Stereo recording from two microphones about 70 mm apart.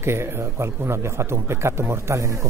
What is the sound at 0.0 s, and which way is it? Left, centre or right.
Speech, right.